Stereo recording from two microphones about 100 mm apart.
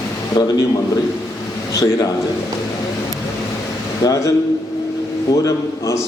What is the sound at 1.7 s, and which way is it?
Speech, 35° left (ahead or behind).